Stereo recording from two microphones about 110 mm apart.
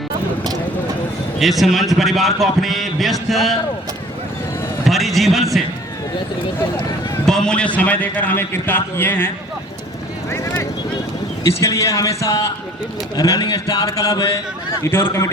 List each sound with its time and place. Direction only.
1.4 s a man's voice: centre (ahead or behind)
4.9 s a man's voice: centre (ahead or behind)
7.3 s a man's voice: 5° left (ahead or behind)
10.2 s vehicle: 30° left (ahead or behind)
11.4 s a man's voice: 30° left (ahead or behind)